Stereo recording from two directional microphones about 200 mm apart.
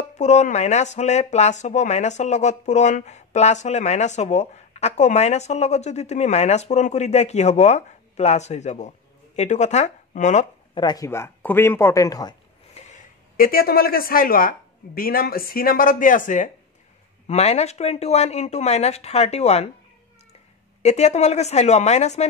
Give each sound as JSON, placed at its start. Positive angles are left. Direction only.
{"t": 0.1, "sound": "speech", "side_deg": 35}
{"t": 10.7, "sound": "speech", "side_deg": 20}
{"t": 12.7, "sound": "speech", "side_deg": 35}
{"t": 20.8, "sound": "speech", "side_deg": 35}